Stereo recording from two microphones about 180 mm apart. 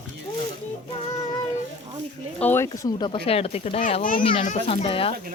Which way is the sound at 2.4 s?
10° left (ahead or behind).